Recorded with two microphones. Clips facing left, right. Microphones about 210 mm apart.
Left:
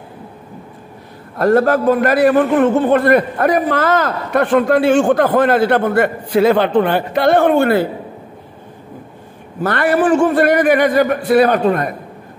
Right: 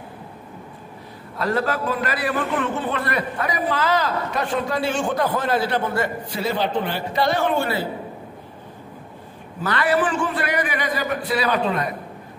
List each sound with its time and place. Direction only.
1.4 s a man's voice: 50° left (ahead or behind)
9.6 s a man's voice: 50° left (ahead or behind)